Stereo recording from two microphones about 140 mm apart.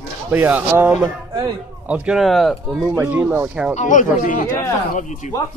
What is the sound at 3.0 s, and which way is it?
Speech, 15° right (ahead or behind).